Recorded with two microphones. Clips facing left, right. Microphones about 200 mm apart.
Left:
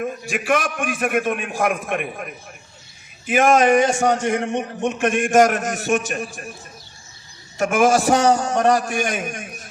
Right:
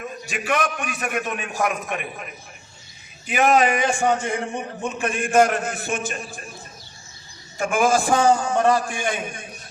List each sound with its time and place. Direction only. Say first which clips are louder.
0.0 s a man's voice: left 5 dB; 50° left (ahead or behind)
3.4 s a man's voice: left 3 dB; 45° left (ahead or behind)
3.9 s a man's voice: left 3 dB; 80° left
5.3 s a man's voice: left 1 dB; 45° left (ahead or behind)
7.6 s a man's voice: left 3 dB; 75° left (ahead or behind)